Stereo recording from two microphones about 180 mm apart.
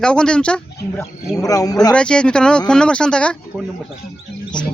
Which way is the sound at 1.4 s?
20° left (ahead or behind).